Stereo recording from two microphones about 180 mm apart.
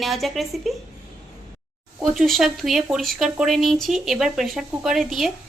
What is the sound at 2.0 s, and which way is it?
Speech, centre (ahead or behind).